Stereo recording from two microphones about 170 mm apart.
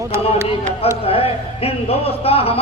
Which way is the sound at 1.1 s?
35° left (ahead or behind).